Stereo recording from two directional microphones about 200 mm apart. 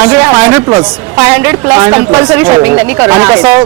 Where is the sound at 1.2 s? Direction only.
10° right (ahead or behind).